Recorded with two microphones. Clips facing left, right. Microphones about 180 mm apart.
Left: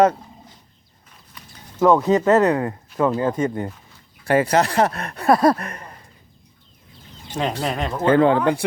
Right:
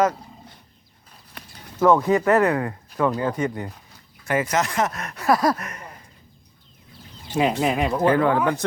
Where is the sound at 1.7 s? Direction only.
15° left (ahead or behind); by 5.8 s 30° left (ahead or behind).